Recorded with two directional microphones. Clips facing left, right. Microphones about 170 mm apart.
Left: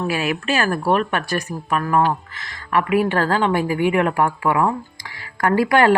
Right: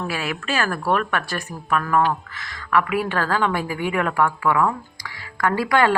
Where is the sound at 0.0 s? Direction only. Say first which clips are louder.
Left 5 dB; 15° left (ahead or behind).